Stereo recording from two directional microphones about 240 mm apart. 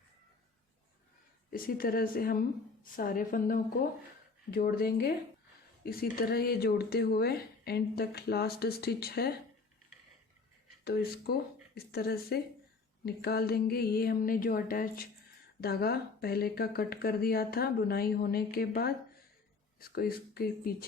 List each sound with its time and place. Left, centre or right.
1.5 s speech: left
10.8 s speech: left